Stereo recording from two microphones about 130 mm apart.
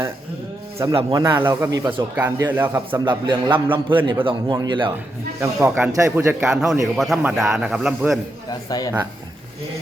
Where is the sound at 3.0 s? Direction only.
35° right (ahead or behind).